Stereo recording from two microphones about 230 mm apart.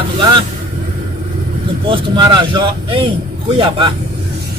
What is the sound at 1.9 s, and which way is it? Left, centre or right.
Speech, right.